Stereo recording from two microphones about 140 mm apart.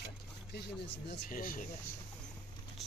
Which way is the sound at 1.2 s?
75° left (ahead or behind).